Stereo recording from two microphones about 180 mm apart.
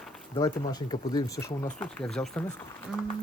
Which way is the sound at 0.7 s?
20° left (ahead or behind).